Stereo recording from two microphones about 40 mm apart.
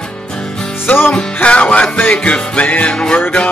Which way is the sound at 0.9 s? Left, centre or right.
Left.